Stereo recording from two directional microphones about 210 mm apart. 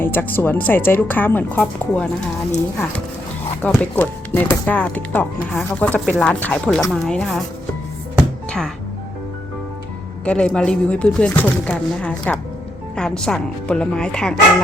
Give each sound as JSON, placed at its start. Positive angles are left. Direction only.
{"t": 0.0, "sound": "speech", "side_deg": 10}
{"t": 8.4, "sound": "music", "side_deg": 5}
{"t": 10.2, "sound": "speech", "side_deg": 5}